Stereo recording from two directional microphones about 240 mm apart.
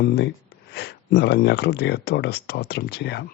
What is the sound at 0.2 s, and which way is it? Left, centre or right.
Speech, left.